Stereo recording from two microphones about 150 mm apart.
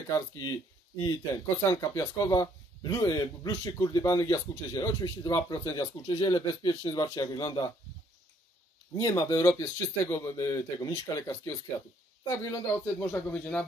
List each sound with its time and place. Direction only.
0.1 s speech: 20° left (ahead or behind)
8.9 s speech: 20° left (ahead or behind)